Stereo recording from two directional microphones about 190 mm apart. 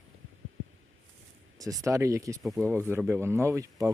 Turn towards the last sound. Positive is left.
turn(degrees=-15)  # may be behind; listen again after turning